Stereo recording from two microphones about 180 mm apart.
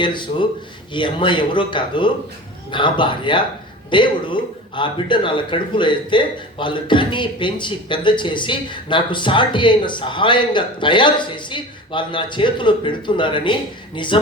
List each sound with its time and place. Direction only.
0.0 s speech: 25° left (ahead or behind)